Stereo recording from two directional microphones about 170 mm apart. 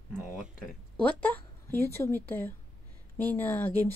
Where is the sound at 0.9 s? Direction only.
10° left (ahead or behind).